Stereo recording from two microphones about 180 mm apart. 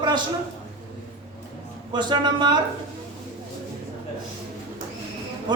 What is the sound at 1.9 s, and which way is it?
Speech, 25° right (ahead or behind).